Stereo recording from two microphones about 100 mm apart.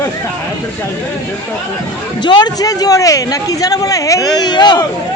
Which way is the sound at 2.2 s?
45° left (ahead or behind).